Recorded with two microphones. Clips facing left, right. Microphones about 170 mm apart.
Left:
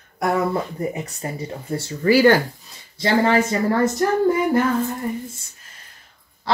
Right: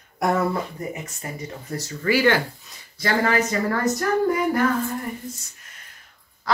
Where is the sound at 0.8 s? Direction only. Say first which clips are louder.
Left 5 dB; 30° left (ahead or behind).